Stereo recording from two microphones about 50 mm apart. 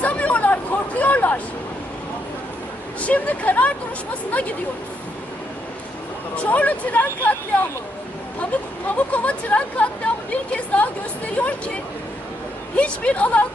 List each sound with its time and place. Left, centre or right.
0.0 s a sound: left
3.0 s speech: left
6.3 s speech: left
9.0 s speech: left
11.3 s speech: left